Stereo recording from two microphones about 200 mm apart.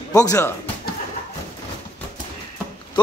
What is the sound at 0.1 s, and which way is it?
Speech, 15° left (ahead or behind).